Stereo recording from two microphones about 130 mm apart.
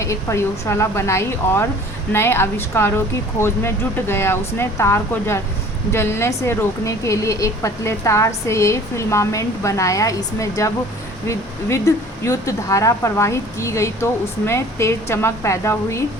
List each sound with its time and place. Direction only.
0.0 s a woman's voice: 20° left (ahead or behind)